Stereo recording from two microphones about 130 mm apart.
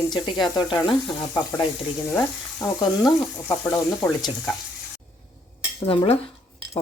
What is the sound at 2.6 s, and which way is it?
Speech, 30° left (ahead or behind).